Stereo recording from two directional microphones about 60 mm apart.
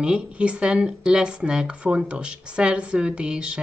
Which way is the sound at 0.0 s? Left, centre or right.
Centre.